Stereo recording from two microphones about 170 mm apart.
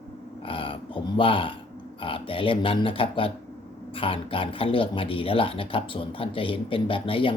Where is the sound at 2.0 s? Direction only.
30° left (ahead or behind).